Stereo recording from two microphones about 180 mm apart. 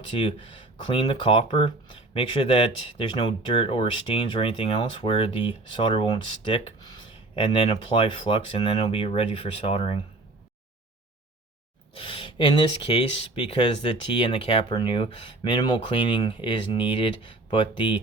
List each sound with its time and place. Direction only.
0.2 s speech: 30° left (ahead or behind)
11.9 s speech: 30° left (ahead or behind)